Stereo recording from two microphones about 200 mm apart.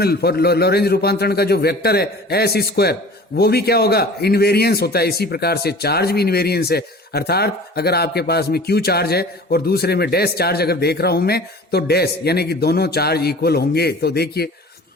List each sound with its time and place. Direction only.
0.0 s a man's voice: 50° left (ahead or behind)